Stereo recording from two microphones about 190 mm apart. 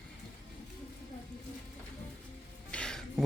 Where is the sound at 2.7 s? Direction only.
5° left (ahead or behind).